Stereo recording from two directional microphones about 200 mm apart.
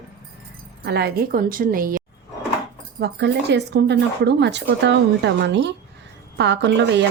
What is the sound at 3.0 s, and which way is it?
Speech, 55° right (ahead or behind).